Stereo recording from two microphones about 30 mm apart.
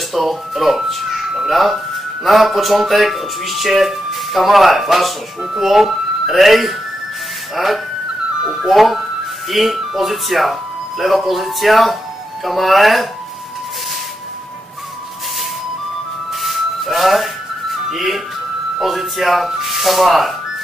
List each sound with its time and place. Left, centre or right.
0.1 s speech: centre
5.4 s speech: right; by 13.1 s centre
16.3 s music: centre
17.8 s speech: centre